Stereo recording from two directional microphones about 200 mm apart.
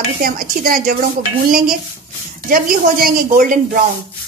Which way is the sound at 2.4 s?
45° right (ahead or behind).